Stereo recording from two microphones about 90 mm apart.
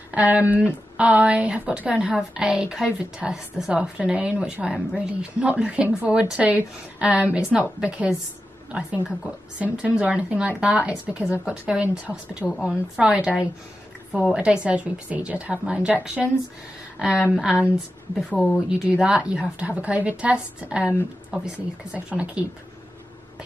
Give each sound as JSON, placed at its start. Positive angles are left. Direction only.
{"t": 0.1, "sound": "a woman's voice", "side_deg": -15}
{"t": 18.3, "sound": "speech", "side_deg": 15}
{"t": 18.7, "sound": "a woman's voice", "side_deg": -10}